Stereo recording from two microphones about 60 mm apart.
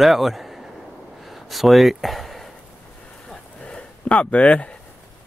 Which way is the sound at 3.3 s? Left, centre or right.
Centre.